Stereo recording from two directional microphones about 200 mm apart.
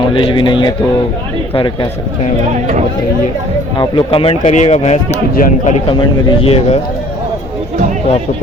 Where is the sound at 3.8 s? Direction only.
25° left (ahead or behind).